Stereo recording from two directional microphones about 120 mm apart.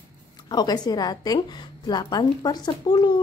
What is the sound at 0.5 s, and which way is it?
A woman's voice, 35° left (ahead or behind).